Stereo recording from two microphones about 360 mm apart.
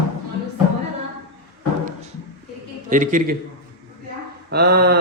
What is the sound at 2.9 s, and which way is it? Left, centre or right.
Speech, right.